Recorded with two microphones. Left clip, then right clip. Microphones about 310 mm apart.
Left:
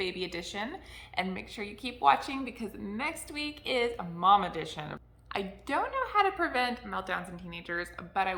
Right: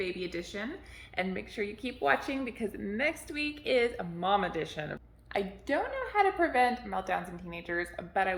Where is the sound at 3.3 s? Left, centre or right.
Left.